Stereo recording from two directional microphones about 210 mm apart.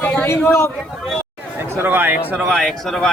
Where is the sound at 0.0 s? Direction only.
5° left (ahead or behind).